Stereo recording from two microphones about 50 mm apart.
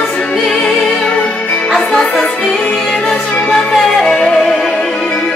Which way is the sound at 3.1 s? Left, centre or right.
Left.